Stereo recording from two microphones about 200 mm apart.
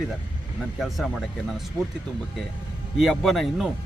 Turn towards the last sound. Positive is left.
turn(degrees=0)  # may be behind; listen again after turning